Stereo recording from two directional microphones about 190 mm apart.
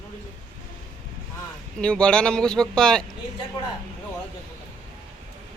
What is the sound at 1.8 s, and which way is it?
Speech, 5° left (ahead or behind).